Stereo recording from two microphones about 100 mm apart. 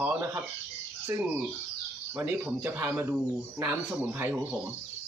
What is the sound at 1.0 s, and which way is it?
A man's voice, 20° right (ahead or behind).